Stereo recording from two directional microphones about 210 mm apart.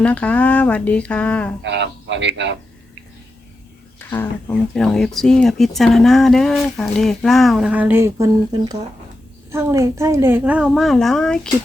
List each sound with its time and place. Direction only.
0.0 s speech: 5° left (ahead or behind)
1.6 s a man's voice: 55° right (ahead or behind)
4.1 s a woman's voice: 10° left (ahead or behind)